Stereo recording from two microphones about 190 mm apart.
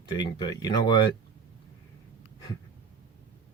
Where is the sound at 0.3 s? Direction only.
20° left (ahead or behind).